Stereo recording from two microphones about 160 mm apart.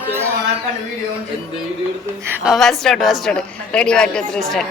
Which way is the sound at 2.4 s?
Centre (ahead or behind).